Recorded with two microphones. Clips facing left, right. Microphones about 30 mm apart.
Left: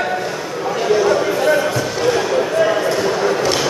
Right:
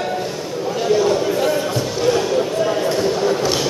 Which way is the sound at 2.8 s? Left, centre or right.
Centre.